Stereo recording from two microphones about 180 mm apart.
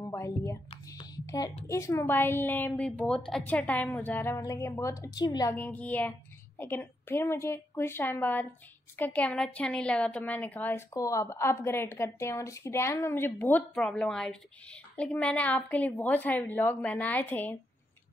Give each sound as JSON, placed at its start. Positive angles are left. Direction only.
{"t": 0.0, "sound": "a sound", "side_deg": 20}
{"t": 1.7, "sound": "a woman's voice", "side_deg": 15}
{"t": 5.6, "sound": "a woman's voice", "side_deg": 10}